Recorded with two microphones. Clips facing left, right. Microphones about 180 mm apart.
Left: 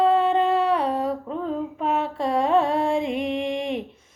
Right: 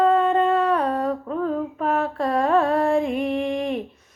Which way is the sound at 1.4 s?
20° left (ahead or behind).